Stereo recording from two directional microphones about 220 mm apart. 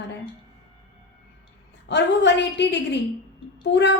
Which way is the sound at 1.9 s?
50° left (ahead or behind).